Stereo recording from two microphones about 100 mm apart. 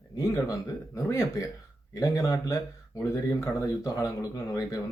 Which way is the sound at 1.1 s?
30° left (ahead or behind).